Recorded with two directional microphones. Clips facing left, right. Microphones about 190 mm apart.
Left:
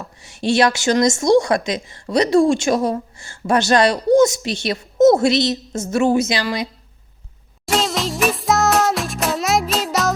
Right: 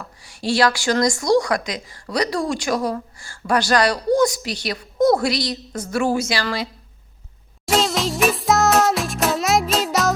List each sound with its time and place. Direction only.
0.0 s a woman's voice: 25° left (ahead or behind)
7.6 s music for children: centre (ahead or behind)